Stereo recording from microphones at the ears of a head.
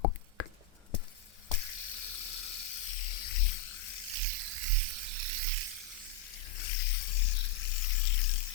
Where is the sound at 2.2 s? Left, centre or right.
Left.